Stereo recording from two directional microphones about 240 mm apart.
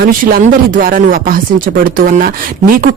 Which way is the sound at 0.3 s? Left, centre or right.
Right.